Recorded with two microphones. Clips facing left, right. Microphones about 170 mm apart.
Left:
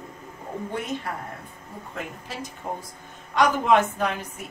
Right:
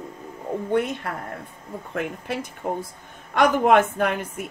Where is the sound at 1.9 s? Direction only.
60° right (ahead or behind).